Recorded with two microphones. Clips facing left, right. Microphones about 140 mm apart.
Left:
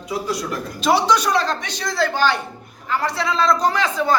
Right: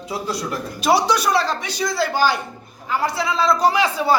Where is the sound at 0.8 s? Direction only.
10° right (ahead or behind).